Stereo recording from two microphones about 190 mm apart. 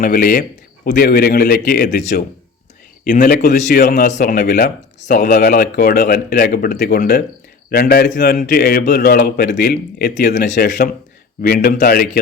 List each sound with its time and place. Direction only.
0.0 s speech: 50° left (ahead or behind)
3.0 s speech: 45° left (ahead or behind)
3.3 s a man's voice: 55° left (ahead or behind)
10.3 s speech: 45° left (ahead or behind)